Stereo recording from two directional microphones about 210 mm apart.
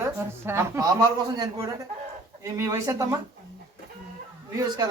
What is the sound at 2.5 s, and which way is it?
Speech, 15° right (ahead or behind).